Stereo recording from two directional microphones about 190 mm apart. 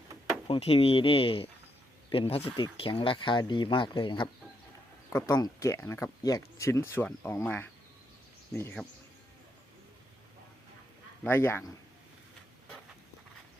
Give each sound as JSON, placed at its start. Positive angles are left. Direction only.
{"t": 0.4, "sound": "speech", "side_deg": 30}
{"t": 11.2, "sound": "speech", "side_deg": 10}